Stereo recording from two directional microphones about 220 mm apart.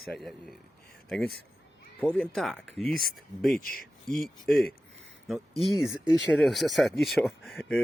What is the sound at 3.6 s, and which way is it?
Speech, 40° left (ahead or behind).